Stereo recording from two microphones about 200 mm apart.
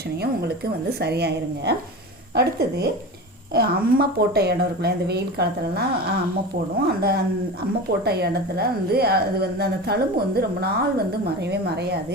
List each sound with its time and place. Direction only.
1.0 s a woman's voice: 55° right (ahead or behind)